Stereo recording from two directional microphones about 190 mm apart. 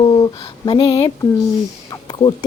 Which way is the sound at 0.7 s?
25° left (ahead or behind).